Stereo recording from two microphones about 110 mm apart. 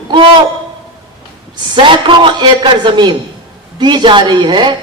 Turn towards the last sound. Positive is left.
turn(degrees=-45)  # may be behind; listen again after turning